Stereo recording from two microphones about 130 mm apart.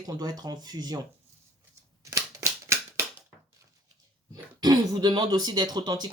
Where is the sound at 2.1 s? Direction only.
20° right (ahead or behind).